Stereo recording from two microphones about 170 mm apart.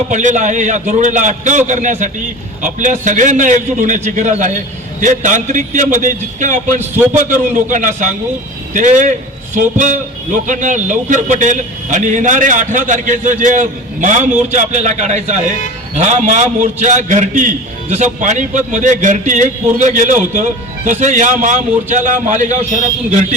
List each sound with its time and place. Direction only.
0.1 s a man's voice: 45° right (ahead or behind)
6.9 s a man's voice: 15° right (ahead or behind)
7.2 s a man's voice: 50° right (ahead or behind)